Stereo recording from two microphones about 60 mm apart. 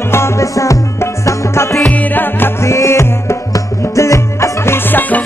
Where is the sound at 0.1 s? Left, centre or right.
Left.